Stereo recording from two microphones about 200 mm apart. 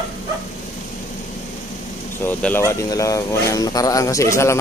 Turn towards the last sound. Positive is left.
turn(degrees=15)  # may be behind; listen again after turning